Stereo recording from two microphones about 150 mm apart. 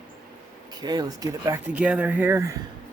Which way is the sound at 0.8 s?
25° right (ahead or behind).